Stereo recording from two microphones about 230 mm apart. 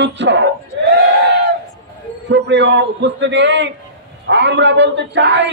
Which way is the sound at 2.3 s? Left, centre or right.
Right.